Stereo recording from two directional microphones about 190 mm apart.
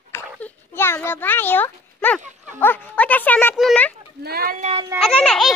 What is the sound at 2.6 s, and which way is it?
Speech, 10° left (ahead or behind).